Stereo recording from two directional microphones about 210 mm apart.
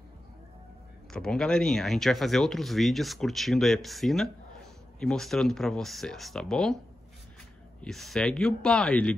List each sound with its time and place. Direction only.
1.1 s speech: 5° left (ahead or behind)
7.8 s speech: centre (ahead or behind)